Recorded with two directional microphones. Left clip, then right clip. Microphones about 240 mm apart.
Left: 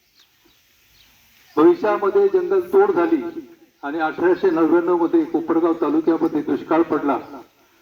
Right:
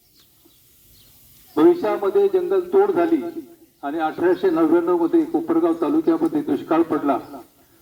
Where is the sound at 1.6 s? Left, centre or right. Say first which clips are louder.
Left 1 dB; centre.